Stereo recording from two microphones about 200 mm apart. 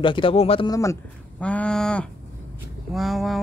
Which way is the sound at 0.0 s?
25° left (ahead or behind).